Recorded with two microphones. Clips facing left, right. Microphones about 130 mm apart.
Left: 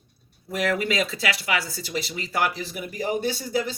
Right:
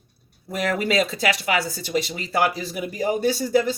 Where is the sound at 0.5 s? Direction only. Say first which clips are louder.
Right 2 dB; 40° right (ahead or behind).